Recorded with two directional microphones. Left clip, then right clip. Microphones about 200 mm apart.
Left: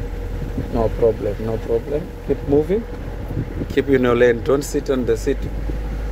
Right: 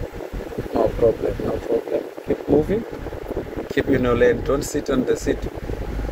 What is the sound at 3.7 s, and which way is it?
Speech, 25° left (ahead or behind).